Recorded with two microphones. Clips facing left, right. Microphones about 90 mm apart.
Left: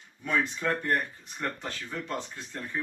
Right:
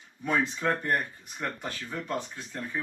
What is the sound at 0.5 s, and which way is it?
Speech, 10° right (ahead or behind).